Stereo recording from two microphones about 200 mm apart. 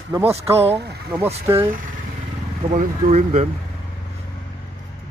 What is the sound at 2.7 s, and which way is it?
Speech, 35° right (ahead or behind).